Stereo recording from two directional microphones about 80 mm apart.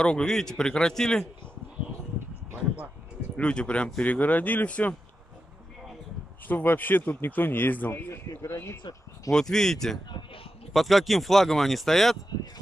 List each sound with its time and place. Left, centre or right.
0.0 s speech: centre
3.3 s speech: centre
6.4 s a man's voice: left
9.3 s speech: centre